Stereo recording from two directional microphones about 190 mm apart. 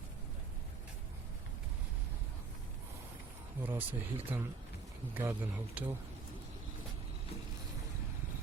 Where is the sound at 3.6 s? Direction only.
10° right (ahead or behind).